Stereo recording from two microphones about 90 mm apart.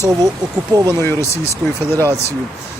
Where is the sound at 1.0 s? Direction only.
25° left (ahead or behind).